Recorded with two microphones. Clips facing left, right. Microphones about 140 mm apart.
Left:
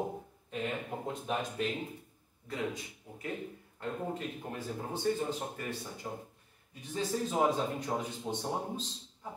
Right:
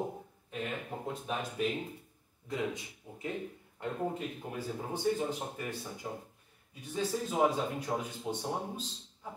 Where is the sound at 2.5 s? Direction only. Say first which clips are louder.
Right 1 dB; 20° right (ahead or behind).